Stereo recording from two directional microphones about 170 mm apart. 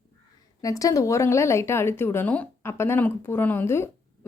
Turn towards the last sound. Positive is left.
turn(degrees=15)  # may be behind; listen again after turning